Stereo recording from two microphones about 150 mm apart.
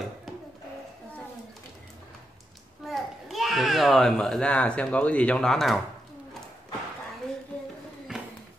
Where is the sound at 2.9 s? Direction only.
Centre (ahead or behind).